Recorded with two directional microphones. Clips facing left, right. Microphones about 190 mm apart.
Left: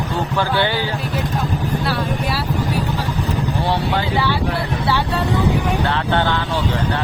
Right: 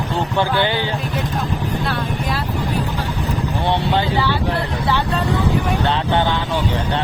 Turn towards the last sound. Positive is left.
turn(degrees=-15)  # may be behind; listen again after turning